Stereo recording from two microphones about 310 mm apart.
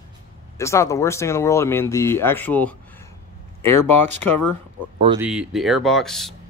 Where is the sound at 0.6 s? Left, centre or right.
Centre.